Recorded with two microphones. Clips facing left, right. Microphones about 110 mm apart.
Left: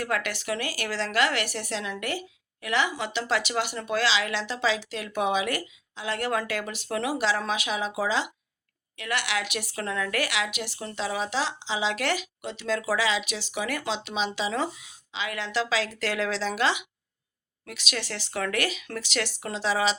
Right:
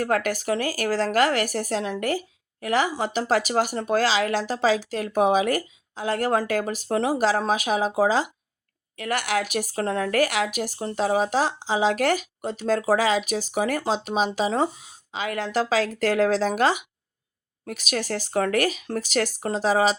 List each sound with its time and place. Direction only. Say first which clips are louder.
0.0 s a woman's voice: right 6 dB; 45° right (ahead or behind)